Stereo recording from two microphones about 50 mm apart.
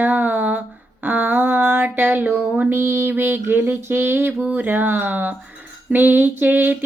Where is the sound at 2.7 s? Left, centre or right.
Right.